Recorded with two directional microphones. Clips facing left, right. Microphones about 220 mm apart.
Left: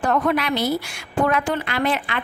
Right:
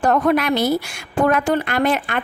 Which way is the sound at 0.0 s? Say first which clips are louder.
Right 4 dB; 45° right (ahead or behind).